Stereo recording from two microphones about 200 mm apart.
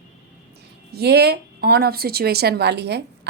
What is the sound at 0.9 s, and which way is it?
Speech, 55° right (ahead or behind).